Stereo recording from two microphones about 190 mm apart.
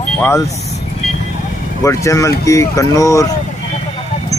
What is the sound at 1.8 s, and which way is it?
Speech, 15° left (ahead or behind).